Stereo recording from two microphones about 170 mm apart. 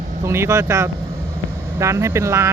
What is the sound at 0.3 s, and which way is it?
Speech, 15° right (ahead or behind).